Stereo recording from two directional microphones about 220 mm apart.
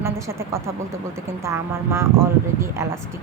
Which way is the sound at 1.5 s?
10° right (ahead or behind).